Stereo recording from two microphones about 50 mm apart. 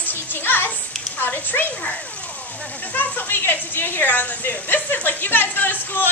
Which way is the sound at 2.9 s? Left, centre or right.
Left.